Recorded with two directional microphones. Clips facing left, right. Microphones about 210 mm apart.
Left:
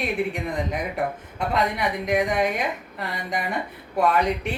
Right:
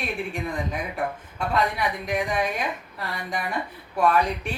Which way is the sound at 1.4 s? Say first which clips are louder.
Left 1 dB; 20° left (ahead or behind).